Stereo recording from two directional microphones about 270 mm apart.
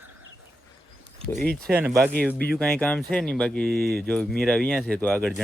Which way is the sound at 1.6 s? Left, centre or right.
Centre.